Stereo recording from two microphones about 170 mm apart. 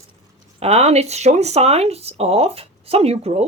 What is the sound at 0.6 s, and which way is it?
Speech, 40° right (ahead or behind).